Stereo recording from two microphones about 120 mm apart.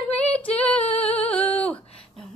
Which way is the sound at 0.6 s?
10° left (ahead or behind).